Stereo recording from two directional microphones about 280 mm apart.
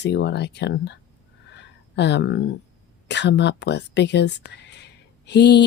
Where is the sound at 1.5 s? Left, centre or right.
Left.